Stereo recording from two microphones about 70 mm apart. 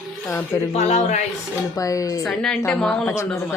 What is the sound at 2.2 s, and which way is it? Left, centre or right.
Speech, centre.